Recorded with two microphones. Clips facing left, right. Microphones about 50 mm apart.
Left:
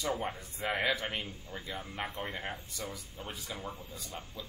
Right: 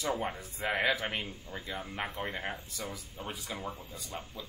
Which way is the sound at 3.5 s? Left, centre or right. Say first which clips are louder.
Right 2 dB; right.